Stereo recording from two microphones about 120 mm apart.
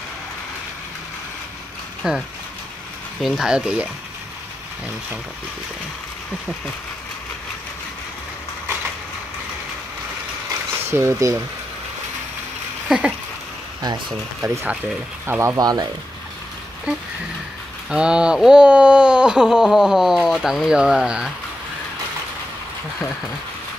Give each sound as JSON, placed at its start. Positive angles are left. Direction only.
{"t": 2.0, "sound": "speech", "side_deg": -5}
{"t": 10.9, "sound": "speech", "side_deg": -20}
{"t": 12.8, "sound": "speech", "side_deg": -5}
{"t": 14.4, "sound": "speech", "side_deg": -25}
{"t": 17.8, "sound": "speech", "side_deg": -5}